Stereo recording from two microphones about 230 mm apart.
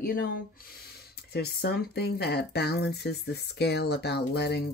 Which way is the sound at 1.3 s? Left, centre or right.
Left.